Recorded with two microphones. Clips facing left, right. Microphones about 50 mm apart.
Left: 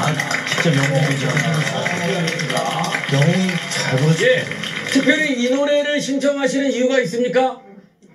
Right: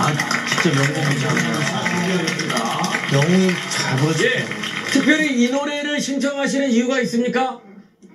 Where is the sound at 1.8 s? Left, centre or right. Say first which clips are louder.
Even; right.